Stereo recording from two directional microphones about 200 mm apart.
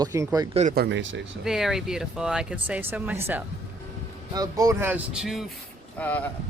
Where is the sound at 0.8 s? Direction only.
65° right (ahead or behind).